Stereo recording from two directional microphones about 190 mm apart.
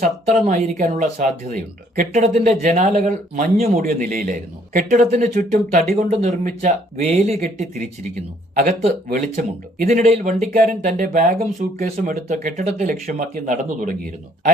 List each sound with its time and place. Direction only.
0.0 s speech: 40° right (ahead or behind)
9.0 s speech: 45° right (ahead or behind)